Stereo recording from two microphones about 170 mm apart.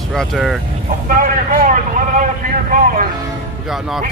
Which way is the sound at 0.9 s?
55° right (ahead or behind).